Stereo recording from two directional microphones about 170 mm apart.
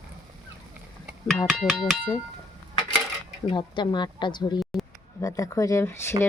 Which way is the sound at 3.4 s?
25° left (ahead or behind).